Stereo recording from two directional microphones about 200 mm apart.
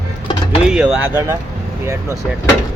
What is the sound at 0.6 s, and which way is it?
Speech, 5° right (ahead or behind).